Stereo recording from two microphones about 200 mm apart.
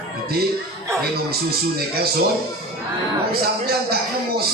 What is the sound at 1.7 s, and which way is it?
Speech, 50° right (ahead or behind).